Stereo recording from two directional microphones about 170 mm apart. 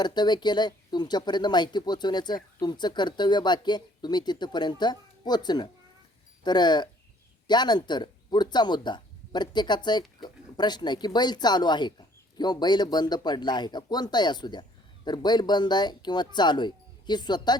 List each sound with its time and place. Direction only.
0.0 s speech: 25° left (ahead or behind)